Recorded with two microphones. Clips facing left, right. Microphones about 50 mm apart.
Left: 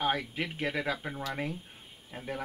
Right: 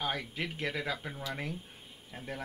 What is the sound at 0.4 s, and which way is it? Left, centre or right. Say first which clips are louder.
Speech: left 3 dB; centre.